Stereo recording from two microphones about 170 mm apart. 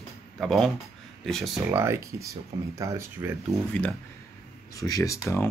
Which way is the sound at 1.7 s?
15° right (ahead or behind).